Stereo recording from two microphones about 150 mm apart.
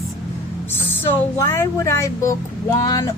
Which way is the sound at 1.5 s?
15° left (ahead or behind).